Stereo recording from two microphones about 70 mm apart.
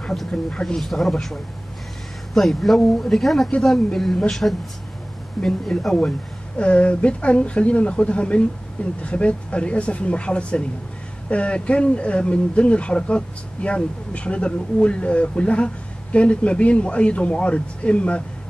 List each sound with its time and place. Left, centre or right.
0.0 s speech: centre
0.7 s speech: centre